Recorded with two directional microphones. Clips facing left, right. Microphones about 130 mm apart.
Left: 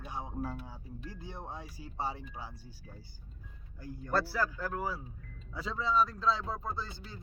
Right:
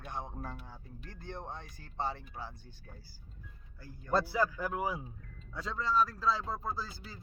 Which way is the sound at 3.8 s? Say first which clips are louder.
Left 7 dB; 15° left (ahead or behind).